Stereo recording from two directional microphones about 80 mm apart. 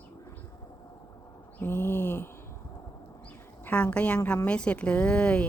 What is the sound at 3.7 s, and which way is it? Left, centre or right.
Speech, centre.